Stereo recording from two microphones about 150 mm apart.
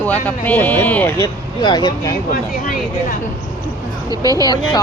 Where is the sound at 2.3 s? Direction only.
65° left (ahead or behind).